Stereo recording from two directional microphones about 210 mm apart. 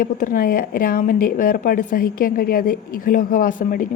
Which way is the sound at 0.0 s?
40° left (ahead or behind).